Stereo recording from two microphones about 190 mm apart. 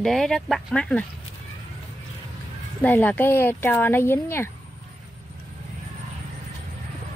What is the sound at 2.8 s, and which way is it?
Speech, 10° left (ahead or behind).